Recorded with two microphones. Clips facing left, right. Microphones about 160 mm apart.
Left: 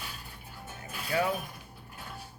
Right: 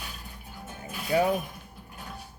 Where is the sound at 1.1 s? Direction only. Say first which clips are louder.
Right 5 dB; 25° right (ahead or behind).